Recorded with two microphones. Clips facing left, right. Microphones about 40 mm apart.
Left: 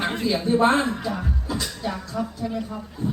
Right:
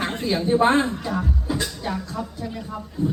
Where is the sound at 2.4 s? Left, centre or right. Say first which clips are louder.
Left 4 dB; centre.